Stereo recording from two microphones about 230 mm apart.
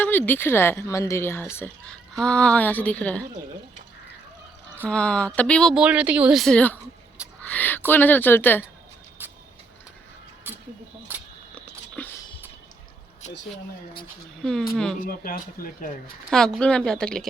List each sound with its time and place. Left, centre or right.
0.0 s a woman's voice: centre
4.9 s speech: centre
7.4 s a sound: centre
7.9 s a woman's voice: centre
9.2 s vehicle: centre
11.1 s camera: centre
11.5 s a sound: centre
13.2 s speech: left
15.0 s speech: left
16.3 s speech: centre